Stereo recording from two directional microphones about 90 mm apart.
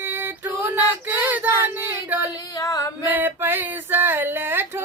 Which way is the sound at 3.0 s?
20° right (ahead or behind).